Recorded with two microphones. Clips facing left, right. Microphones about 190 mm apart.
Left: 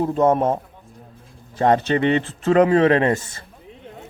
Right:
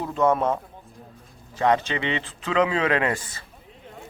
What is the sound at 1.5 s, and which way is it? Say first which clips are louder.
Speech: left 5 dB; 50° left (ahead or behind).